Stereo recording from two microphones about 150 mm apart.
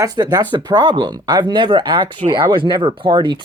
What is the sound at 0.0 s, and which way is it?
Speech, 25° right (ahead or behind).